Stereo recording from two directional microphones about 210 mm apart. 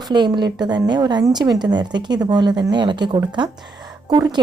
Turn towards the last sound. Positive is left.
turn(degrees=-20)  # may be behind; listen again after turning